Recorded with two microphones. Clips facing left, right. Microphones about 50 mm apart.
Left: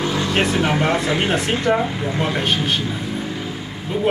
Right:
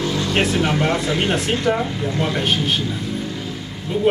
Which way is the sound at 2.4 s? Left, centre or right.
Centre.